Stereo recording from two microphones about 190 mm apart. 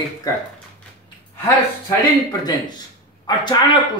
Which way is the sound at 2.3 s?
20° left (ahead or behind).